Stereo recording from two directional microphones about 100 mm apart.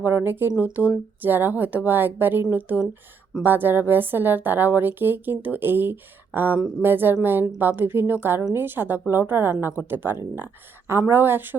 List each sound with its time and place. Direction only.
0.0 s a woman's voice: 20° right (ahead or behind)